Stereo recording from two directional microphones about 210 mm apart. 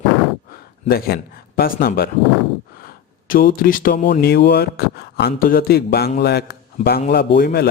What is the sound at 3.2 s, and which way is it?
A man's voice, 40° left (ahead or behind).